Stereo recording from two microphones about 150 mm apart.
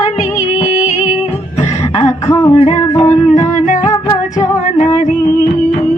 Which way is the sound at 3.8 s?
25° left (ahead or behind).